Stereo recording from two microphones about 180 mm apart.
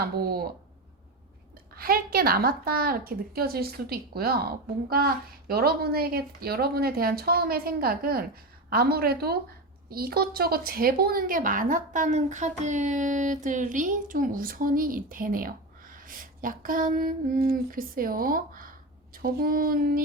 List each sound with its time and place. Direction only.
0.2 s a woman's voice: 60° right (ahead or behind)
1.7 s a woman's voice: 55° right (ahead or behind)